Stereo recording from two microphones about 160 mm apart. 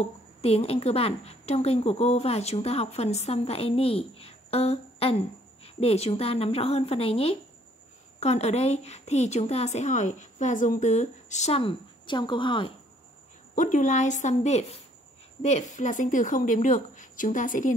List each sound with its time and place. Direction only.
0.4 s a woman's voice: 40° left (ahead or behind)
13.6 s a woman's voice: 50° left (ahead or behind)